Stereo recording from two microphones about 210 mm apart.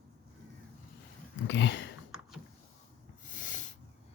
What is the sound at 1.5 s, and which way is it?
Speech, 60° left (ahead or behind).